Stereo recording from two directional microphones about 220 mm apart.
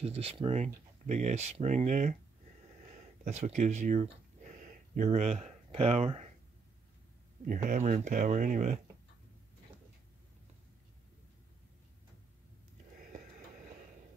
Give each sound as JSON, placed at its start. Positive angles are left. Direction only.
{"t": 0.0, "sound": "speech", "side_deg": -25}
{"t": 3.3, "sound": "speech", "side_deg": -30}
{"t": 7.4, "sound": "speech", "side_deg": -35}